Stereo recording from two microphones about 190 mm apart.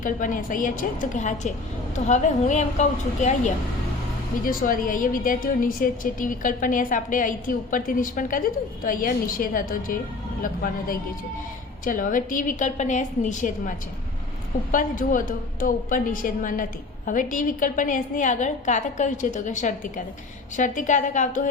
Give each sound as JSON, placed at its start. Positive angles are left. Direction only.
{"t": 0.0, "sound": "a woman's voice", "side_deg": 45}